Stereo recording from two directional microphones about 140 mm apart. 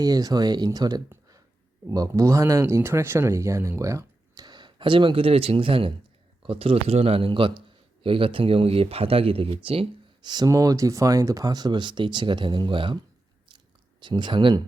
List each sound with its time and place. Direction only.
0.0 s speech: 25° right (ahead or behind)
14.0 s speech: 35° right (ahead or behind)